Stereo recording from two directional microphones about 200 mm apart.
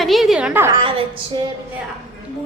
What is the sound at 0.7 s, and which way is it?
Speech, 25° right (ahead or behind).